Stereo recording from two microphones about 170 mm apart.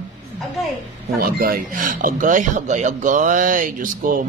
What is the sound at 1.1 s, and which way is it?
Speech, 60° right (ahead or behind).